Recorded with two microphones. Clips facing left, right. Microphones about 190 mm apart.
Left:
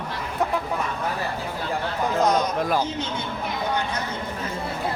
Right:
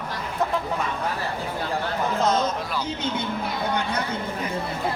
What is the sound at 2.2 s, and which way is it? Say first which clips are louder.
Speech: even; 15° left (ahead or behind).